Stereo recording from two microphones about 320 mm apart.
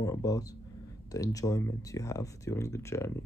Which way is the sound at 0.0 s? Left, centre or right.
Centre.